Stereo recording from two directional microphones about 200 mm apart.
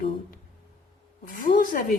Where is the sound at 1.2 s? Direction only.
45° left (ahead or behind).